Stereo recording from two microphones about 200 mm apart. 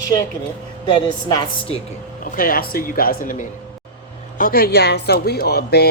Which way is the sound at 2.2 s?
45° left (ahead or behind).